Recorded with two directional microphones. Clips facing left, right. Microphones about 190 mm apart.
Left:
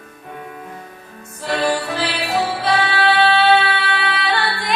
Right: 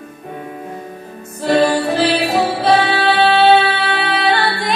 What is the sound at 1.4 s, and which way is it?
Music, 35° right (ahead or behind).